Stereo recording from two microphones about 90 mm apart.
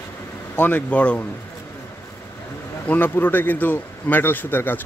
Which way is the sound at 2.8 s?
20° left (ahead or behind).